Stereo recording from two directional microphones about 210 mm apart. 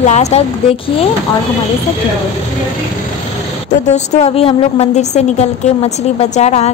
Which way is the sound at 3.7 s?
35° left (ahead or behind).